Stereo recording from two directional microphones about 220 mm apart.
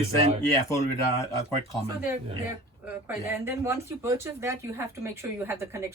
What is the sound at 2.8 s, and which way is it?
Speech, 10° right (ahead or behind).